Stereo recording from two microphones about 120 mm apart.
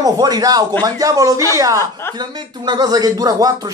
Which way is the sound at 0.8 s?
30° right (ahead or behind).